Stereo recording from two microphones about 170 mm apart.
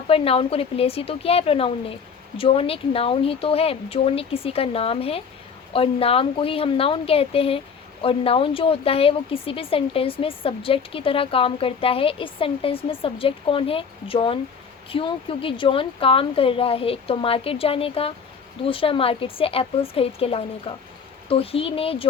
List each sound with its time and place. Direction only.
0.1 s speech: 35° left (ahead or behind)